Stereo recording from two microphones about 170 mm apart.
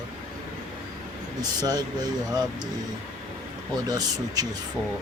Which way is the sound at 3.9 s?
25° right (ahead or behind).